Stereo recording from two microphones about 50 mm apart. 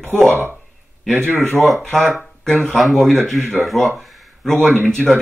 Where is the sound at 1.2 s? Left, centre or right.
Right.